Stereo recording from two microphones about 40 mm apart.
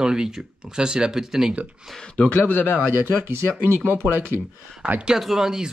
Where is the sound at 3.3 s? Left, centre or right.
Right.